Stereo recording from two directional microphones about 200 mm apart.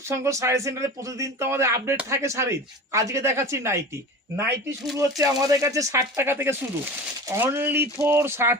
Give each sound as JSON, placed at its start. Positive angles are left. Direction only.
{"t": 0.1, "sound": "speech", "side_deg": -15}
{"t": 4.9, "sound": "speech", "side_deg": -15}